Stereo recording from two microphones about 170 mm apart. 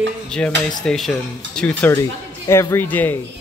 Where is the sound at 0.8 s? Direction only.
Centre (ahead or behind).